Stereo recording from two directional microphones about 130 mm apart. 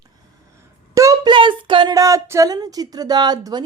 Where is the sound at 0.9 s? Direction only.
25° right (ahead or behind).